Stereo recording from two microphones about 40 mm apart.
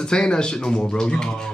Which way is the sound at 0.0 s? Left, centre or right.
Left.